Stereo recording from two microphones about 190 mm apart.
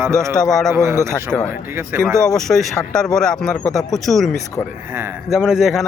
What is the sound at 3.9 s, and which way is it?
A man's voice, centre (ahead or behind).